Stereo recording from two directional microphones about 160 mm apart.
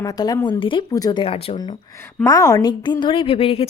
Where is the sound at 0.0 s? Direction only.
25° left (ahead or behind).